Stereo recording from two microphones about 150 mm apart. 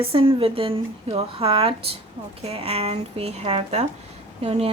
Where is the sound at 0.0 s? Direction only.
40° right (ahead or behind).